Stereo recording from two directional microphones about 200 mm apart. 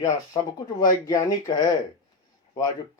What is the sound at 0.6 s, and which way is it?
Speech, 20° left (ahead or behind).